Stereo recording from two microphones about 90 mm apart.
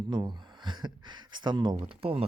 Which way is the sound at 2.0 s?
90° right.